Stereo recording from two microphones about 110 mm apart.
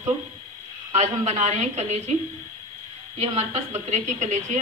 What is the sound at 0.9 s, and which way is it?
A woman's voice, 90° right.